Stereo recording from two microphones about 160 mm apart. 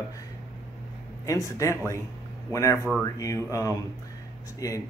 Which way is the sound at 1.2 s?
20° left (ahead or behind).